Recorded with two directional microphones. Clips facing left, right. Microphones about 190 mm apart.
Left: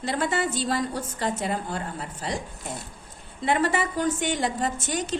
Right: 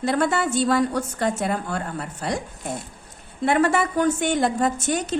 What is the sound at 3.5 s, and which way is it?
A woman's voice, 55° right (ahead or behind).